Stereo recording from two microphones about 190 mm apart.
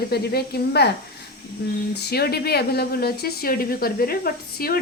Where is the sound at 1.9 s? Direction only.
55° left (ahead or behind).